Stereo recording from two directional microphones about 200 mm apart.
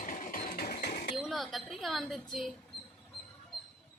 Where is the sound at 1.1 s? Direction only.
Centre (ahead or behind).